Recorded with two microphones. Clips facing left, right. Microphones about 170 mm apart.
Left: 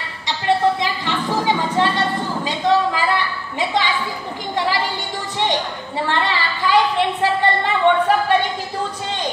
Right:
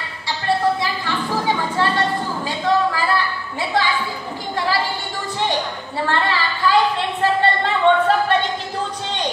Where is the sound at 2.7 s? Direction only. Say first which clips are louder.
Left 1 dB; 20° left (ahead or behind).